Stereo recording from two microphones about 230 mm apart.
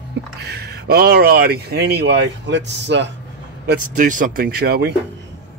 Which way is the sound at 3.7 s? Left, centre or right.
Right.